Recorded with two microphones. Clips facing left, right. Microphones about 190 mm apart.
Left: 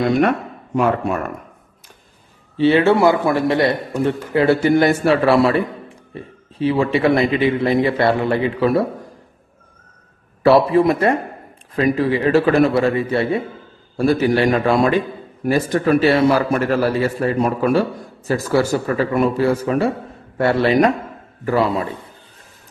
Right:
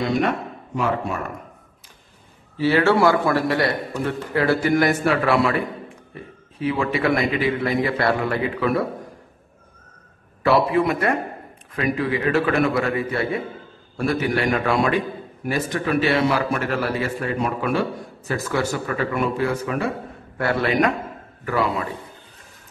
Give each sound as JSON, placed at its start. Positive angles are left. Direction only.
{"t": 2.5, "sound": "a man's voice", "side_deg": 25}
{"t": 10.4, "sound": "a man's voice", "side_deg": 35}